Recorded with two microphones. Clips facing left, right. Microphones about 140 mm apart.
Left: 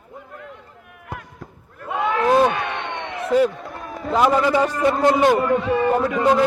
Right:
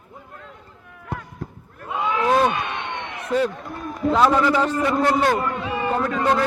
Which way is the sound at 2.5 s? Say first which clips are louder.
Left 1 dB; 65° left (ahead or behind).